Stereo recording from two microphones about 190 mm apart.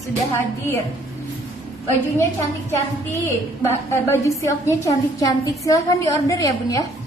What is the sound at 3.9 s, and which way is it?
A woman's voice, 15° left (ahead or behind).